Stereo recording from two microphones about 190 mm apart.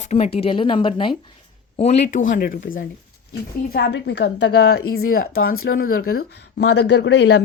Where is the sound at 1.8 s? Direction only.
40° left (ahead or behind).